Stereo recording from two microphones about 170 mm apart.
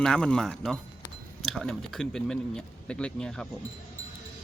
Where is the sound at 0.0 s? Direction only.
5° left (ahead or behind).